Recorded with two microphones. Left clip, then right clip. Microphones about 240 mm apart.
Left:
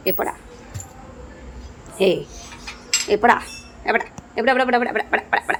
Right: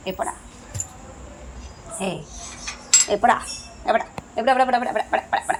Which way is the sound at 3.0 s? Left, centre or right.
Centre.